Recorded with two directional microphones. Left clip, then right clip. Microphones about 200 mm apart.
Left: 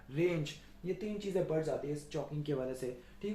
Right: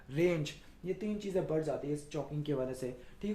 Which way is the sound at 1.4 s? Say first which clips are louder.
Even; 40° right (ahead or behind).